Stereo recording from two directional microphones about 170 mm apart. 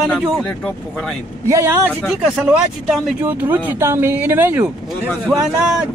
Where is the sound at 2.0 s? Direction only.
5° right (ahead or behind).